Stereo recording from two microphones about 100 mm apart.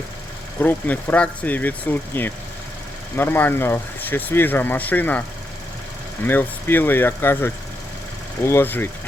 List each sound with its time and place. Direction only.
0.6 s speech: 15° left (ahead or behind)
6.2 s speech: 20° left (ahead or behind)